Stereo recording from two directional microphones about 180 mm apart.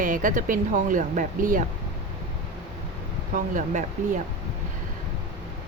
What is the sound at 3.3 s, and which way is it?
Speech, 45° right (ahead or behind).